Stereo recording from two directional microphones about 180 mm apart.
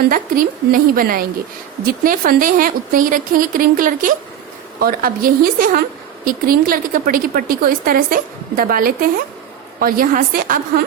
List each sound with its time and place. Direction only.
0.1 s a woman's voice: 50° right (ahead or behind)